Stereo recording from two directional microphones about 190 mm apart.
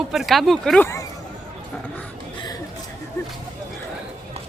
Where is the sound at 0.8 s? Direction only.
15° left (ahead or behind).